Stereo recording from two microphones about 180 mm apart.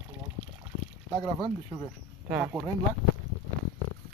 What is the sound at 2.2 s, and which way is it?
Speech, 5° right (ahead or behind).